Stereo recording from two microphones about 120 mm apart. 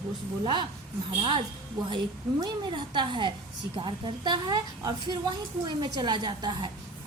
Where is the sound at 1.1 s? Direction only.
45° right (ahead or behind).